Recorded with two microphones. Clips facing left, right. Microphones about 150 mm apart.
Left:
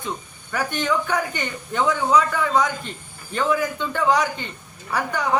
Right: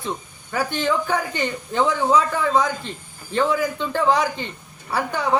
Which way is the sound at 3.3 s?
30° right (ahead or behind).